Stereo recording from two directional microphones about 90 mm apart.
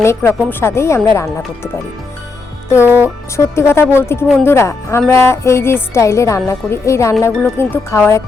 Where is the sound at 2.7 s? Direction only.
20° right (ahead or behind).